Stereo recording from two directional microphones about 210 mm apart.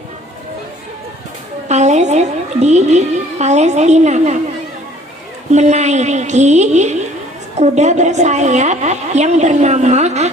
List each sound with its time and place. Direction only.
1.7 s a woman's voice: 35° right (ahead or behind)
5.5 s a woman's voice: 35° right (ahead or behind)